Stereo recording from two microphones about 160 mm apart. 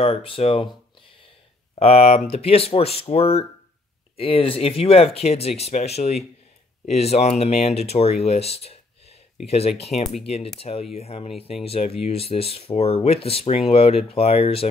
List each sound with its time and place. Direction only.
0.0 s speech: 35° left (ahead or behind)
1.8 s speech: 40° left (ahead or behind)